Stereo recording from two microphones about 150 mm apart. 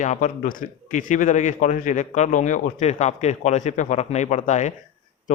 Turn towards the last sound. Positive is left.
turn(degrees=55)  # may be behind; listen again after turning